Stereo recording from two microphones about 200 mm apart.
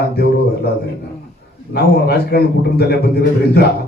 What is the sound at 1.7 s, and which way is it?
Speech, 55° left (ahead or behind).